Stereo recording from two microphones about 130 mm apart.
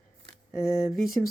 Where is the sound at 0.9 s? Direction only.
Centre (ahead or behind).